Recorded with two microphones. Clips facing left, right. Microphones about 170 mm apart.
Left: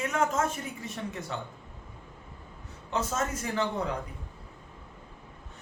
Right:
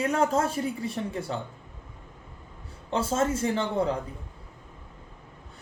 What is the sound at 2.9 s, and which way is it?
Speech, 30° right (ahead or behind).